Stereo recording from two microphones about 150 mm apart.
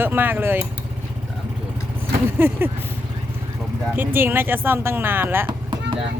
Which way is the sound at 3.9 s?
15° right (ahead or behind).